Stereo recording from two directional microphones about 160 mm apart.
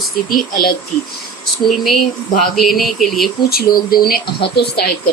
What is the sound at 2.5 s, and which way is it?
Speech, centre (ahead or behind).